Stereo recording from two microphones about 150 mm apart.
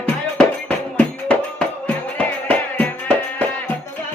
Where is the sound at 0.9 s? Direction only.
5° left (ahead or behind).